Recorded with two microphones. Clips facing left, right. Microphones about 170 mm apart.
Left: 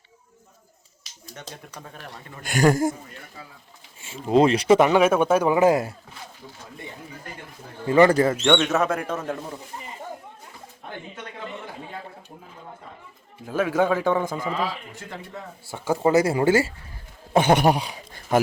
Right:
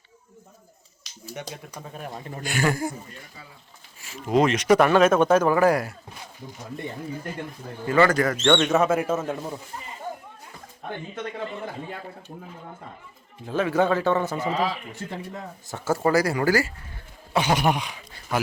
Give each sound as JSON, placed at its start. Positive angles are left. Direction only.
{"t": 1.2, "sound": "speech", "side_deg": -10}
{"t": 2.4, "sound": "speech", "side_deg": 45}
{"t": 4.0, "sound": "speech", "side_deg": 30}
{"t": 4.8, "sound": "a man's voice", "side_deg": 15}
{"t": 7.9, "sound": "speech", "side_deg": 25}
{"t": 8.4, "sound": "speech", "side_deg": 5}
{"t": 13.4, "sound": "a man's voice", "side_deg": 10}
{"t": 15.6, "sound": "speech", "side_deg": 10}
{"t": 17.3, "sound": "speech", "side_deg": 55}
{"t": 17.6, "sound": "a man's voice", "side_deg": 35}